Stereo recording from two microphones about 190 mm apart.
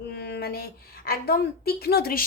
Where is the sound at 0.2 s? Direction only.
60° left (ahead or behind).